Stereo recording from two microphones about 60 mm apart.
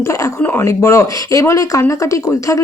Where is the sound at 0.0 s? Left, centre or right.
Left.